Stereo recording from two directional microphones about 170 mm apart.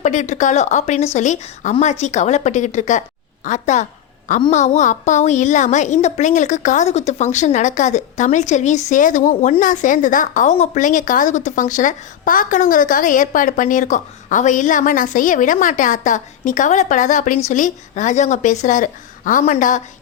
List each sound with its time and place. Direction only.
0.0 s a woman's voice: 45° left (ahead or behind)